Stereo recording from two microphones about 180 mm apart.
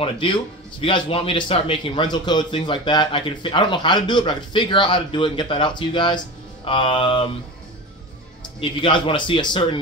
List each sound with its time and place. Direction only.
0.0 s a man's voice: 30° left (ahead or behind)
8.5 s a man's voice: 30° left (ahead or behind)